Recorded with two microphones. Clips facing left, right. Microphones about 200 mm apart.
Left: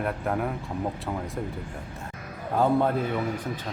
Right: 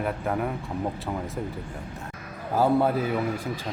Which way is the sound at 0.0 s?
Centre (ahead or behind).